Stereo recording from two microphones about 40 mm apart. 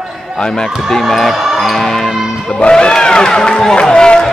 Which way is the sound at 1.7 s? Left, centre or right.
Centre.